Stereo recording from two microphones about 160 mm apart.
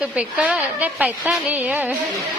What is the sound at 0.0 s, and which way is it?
A woman's voice, 5° right (ahead or behind).